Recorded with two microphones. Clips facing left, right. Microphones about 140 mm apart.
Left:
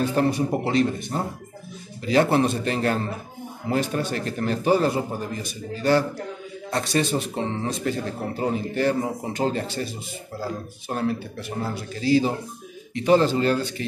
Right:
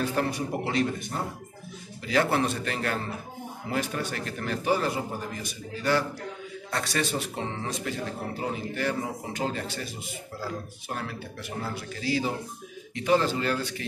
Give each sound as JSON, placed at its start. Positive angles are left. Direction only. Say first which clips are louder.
{"t": 0.0, "sound": "a man's voice", "louder": "left 6 dB", "side_deg": 25}
{"t": 6.7, "sound": "a man's voice", "louder": "left 6 dB", "side_deg": 20}